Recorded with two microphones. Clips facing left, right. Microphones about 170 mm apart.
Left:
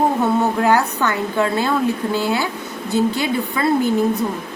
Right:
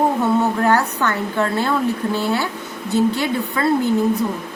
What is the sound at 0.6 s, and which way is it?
A woman's voice, 15° left (ahead or behind).